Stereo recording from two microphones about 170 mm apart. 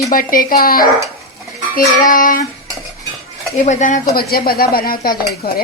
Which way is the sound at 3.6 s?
45° left (ahead or behind).